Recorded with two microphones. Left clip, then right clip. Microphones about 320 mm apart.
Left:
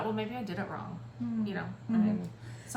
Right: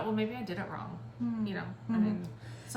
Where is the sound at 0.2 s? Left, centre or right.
Centre.